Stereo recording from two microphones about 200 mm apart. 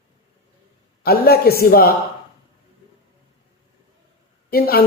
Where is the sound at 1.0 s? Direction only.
50° left (ahead or behind).